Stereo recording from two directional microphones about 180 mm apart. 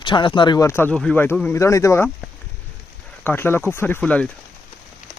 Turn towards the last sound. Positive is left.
turn(degrees=5)  # may be behind; listen again after turning